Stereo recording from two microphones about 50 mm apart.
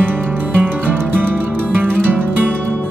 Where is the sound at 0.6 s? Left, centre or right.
Right.